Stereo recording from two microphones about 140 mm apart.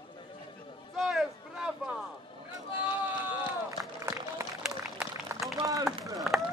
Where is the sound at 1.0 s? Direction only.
Centre (ahead or behind).